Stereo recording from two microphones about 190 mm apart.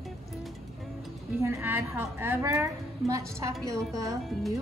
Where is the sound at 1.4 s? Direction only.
10° right (ahead or behind).